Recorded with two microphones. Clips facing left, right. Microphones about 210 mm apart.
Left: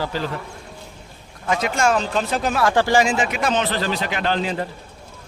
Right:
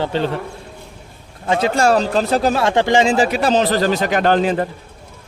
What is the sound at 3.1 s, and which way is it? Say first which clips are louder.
A man's voice: right 6 dB; 35° right (ahead or behind).